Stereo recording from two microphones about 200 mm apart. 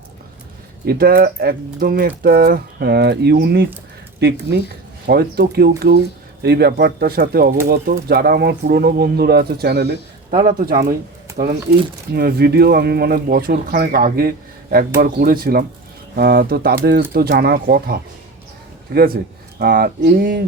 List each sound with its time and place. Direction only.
0.9 s speech: 50° right (ahead or behind)
11.4 s speech: 40° right (ahead or behind)
12.1 s speech: 50° right (ahead or behind)